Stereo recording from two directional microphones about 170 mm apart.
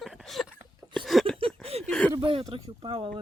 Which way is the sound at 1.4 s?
35° right (ahead or behind).